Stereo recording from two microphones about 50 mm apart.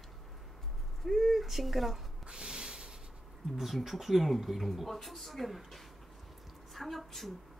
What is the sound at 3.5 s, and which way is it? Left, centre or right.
Speech, centre.